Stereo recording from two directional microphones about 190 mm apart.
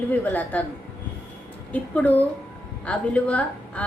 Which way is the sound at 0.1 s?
10° left (ahead or behind).